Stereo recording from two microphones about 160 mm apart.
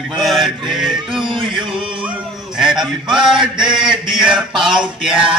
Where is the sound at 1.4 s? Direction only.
30° right (ahead or behind).